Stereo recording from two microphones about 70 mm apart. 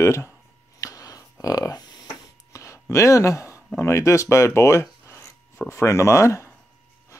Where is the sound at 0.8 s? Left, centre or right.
Left.